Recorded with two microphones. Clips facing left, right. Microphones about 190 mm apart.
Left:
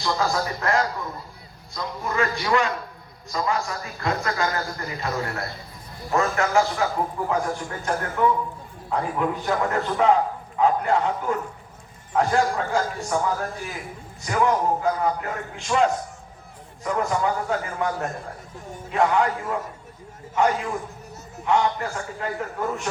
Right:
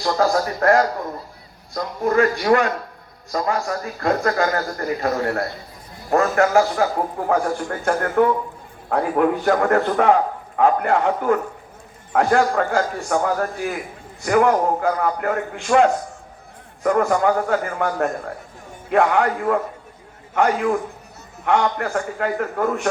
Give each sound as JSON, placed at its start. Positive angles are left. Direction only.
{"t": 0.3, "sound": "a man's voice", "side_deg": -50}
{"t": 7.3, "sound": "a man's voice", "side_deg": -60}